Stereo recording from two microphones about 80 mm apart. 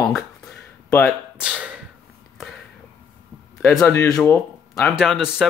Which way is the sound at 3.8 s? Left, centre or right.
Left.